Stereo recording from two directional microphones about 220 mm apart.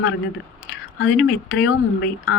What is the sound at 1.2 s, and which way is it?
Speech, 55° left (ahead or behind).